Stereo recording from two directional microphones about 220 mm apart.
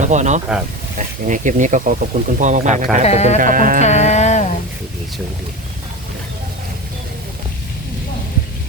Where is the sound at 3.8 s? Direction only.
30° left (ahead or behind).